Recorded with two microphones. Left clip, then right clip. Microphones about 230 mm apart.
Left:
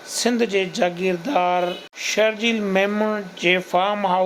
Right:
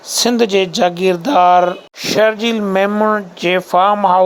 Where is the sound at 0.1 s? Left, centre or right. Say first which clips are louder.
Right 7 dB; right.